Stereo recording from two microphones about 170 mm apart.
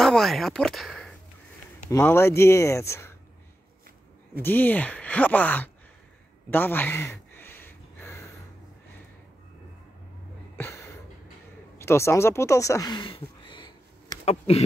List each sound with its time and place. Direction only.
0.0 s speech: centre (ahead or behind)
1.9 s speech: 15° left (ahead or behind)
4.4 s speech: 10° left (ahead or behind)
6.5 s a sound: 10° left (ahead or behind)
10.6 s a sound: 15° left (ahead or behind)
11.8 s speech: 15° left (ahead or behind)